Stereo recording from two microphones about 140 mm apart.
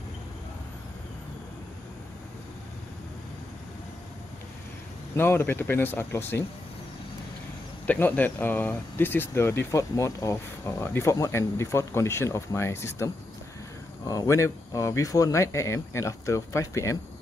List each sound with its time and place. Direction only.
5.1 s speech: 15° left (ahead or behind)
7.8 s speech: 10° left (ahead or behind)